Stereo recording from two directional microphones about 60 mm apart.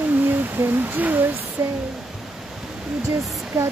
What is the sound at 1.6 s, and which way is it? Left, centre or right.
Speech, right.